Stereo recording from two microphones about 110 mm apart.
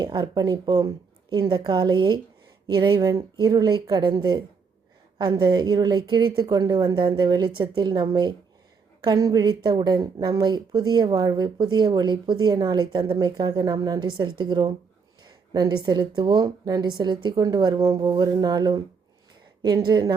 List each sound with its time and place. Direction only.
0.0 s a woman's voice: 40° right (ahead or behind)